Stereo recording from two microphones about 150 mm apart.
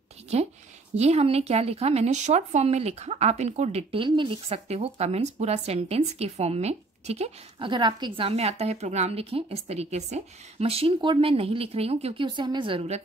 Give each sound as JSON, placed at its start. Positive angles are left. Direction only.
{"t": 0.3, "sound": "a woman's voice", "side_deg": -45}
{"t": 7.5, "sound": "a woman's voice", "side_deg": -30}